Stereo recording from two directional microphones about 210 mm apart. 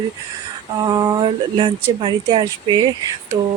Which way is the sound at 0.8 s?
15° right (ahead or behind).